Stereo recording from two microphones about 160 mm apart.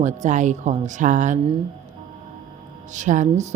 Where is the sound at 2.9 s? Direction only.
50° right (ahead or behind).